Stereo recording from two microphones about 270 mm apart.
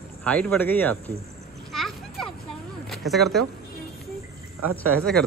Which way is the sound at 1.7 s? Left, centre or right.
Centre.